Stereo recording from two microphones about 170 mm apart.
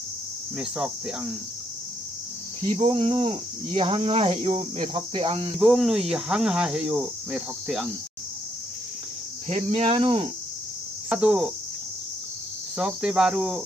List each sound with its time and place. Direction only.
0.6 s cricket: centre (ahead or behind)
2.6 s speech: 30° right (ahead or behind)
5.6 s cricket: centre (ahead or behind)
9.5 s speech: 40° right (ahead or behind)
11.1 s cricket: 5° right (ahead or behind)
12.7 s cricket: 5° right (ahead or behind)